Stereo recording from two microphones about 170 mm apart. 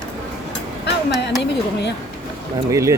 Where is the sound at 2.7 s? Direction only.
15° right (ahead or behind).